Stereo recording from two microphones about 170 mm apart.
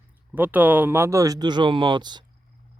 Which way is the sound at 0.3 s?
10° right (ahead or behind).